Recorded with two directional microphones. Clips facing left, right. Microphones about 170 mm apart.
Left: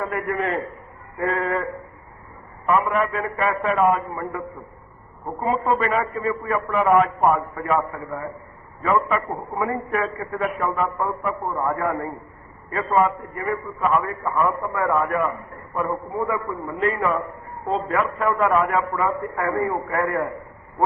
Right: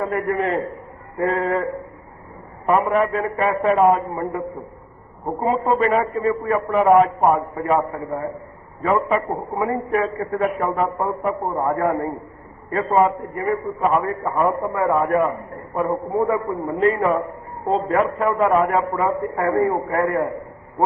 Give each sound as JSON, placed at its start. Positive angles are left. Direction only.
{"t": 0.0, "sound": "a man's voice", "side_deg": -35}